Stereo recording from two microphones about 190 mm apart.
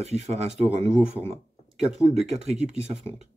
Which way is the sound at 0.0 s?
35° right (ahead or behind).